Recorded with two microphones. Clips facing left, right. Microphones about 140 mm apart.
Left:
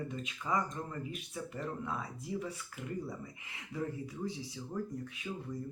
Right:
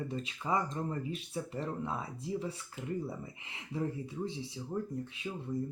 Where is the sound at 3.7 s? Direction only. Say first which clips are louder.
Right 3 dB; 30° right (ahead or behind).